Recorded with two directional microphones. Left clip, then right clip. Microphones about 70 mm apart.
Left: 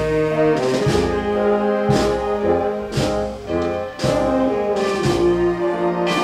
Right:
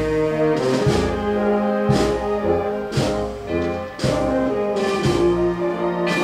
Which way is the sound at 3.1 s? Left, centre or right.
Left.